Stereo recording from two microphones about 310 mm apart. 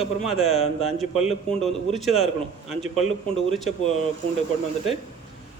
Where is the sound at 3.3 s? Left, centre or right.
Centre.